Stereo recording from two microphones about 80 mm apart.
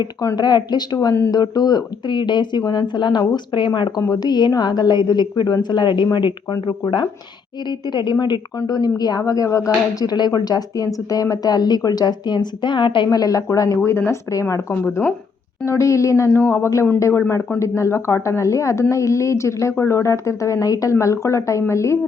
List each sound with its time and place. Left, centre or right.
0.3 s speech: left
3.8 s speech: left
8.5 s a woman's voice: left
13.1 s a woman's voice: left
13.8 s speech: left
15.6 s speech: left